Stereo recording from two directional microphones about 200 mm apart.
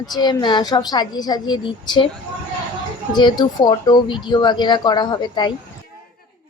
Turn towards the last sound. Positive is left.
turn(degrees=20)  # may be behind; listen again after turning